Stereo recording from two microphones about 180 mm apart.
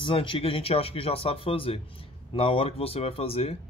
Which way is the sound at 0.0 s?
30° left (ahead or behind).